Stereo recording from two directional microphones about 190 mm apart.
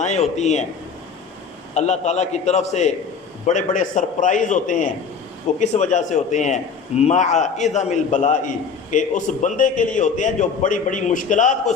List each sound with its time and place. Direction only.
0.0 s a man's voice: 35° left (ahead or behind)
1.7 s a man's voice: 35° left (ahead or behind)